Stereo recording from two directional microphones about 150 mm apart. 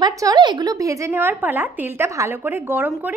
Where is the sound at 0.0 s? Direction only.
25° right (ahead or behind).